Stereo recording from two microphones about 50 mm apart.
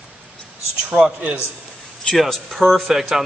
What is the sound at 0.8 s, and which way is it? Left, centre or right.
Speech, centre.